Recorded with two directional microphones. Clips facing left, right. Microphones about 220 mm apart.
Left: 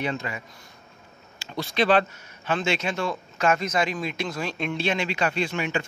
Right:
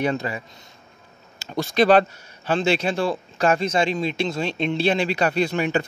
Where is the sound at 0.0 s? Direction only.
40° right (ahead or behind).